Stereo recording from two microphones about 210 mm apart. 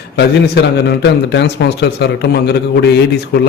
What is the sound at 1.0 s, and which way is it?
A man's voice, 55° left (ahead or behind).